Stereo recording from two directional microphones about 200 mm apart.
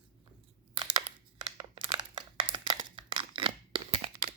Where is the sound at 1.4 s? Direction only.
20° right (ahead or behind).